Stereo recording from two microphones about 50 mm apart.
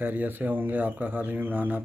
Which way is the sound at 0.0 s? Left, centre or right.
Right.